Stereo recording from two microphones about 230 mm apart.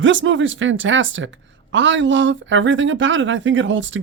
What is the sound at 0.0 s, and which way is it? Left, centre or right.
Speech, right.